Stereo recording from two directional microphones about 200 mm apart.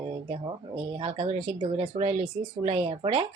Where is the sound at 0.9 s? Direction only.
25° right (ahead or behind).